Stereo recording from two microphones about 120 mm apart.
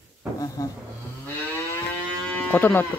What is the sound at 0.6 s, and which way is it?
Speech, 30° left (ahead or behind).